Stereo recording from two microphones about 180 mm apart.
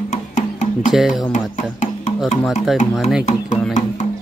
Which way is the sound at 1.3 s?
40° left (ahead or behind).